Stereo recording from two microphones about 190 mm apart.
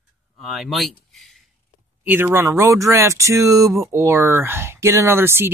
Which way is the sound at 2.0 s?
10° right (ahead or behind).